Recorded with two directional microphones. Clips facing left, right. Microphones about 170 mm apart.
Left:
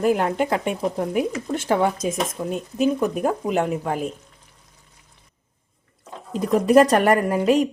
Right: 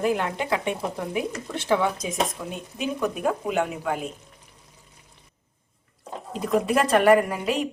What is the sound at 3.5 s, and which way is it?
Speech, 40° left (ahead or behind).